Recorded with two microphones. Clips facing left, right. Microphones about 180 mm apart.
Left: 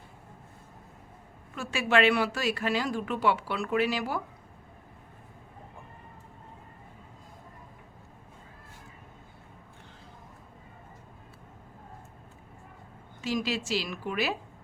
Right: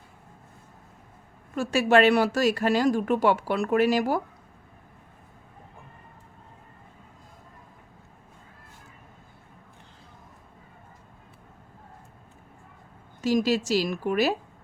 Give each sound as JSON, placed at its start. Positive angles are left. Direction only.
{"t": 1.5, "sound": "speech", "side_deg": -40}
{"t": 13.2, "sound": "a woman's voice", "side_deg": -40}